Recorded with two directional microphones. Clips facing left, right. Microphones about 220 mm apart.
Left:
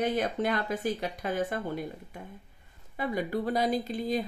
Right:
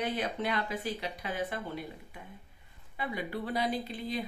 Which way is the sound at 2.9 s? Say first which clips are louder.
Left 6 dB; 45° left (ahead or behind).